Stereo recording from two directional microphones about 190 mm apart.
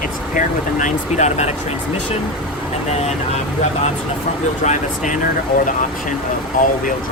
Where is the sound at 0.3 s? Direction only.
40° left (ahead or behind).